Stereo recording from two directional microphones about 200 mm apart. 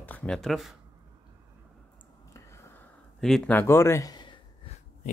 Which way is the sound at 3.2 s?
5° left (ahead or behind).